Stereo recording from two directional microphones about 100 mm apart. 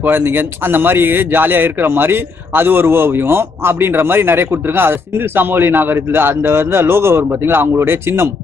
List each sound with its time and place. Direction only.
0.0 s speech: 20° right (ahead or behind)